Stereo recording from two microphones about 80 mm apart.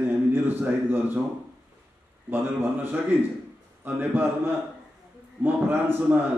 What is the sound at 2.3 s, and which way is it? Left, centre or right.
A man's voice, right.